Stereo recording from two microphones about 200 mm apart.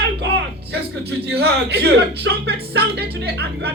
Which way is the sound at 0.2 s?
55° right (ahead or behind).